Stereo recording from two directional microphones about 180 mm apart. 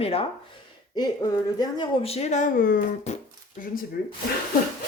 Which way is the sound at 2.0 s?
35° left (ahead or behind).